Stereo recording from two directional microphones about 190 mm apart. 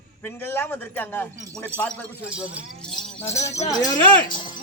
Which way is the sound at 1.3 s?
15° right (ahead or behind).